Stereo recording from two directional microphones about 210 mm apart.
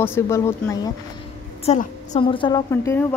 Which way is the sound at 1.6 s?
30° left (ahead or behind).